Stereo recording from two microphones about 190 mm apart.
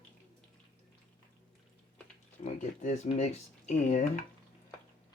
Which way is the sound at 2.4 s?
40° left (ahead or behind).